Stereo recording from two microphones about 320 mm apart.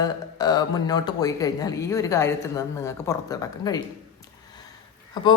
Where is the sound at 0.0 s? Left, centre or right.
Centre.